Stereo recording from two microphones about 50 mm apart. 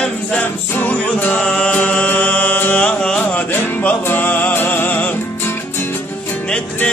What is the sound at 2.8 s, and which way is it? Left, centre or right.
Music, left.